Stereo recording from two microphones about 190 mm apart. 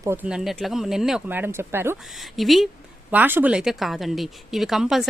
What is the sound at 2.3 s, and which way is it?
Speech, centre (ahead or behind).